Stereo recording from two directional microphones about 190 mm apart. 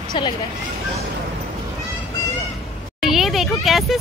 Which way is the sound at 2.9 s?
Centre (ahead or behind).